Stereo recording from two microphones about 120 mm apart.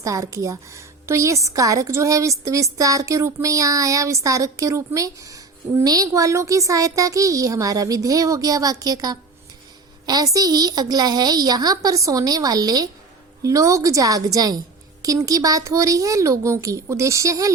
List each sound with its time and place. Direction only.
0.0 s a woman's voice: 25° right (ahead or behind)